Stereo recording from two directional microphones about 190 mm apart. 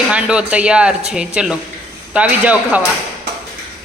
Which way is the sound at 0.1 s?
5° right (ahead or behind).